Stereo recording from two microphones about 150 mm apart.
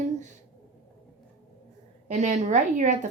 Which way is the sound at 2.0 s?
50° right (ahead or behind).